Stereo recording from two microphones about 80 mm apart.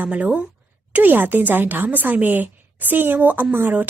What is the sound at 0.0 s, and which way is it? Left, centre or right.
A woman's voice, centre.